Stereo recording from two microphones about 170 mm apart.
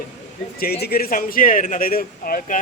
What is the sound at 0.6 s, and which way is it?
Speech, 65° left (ahead or behind).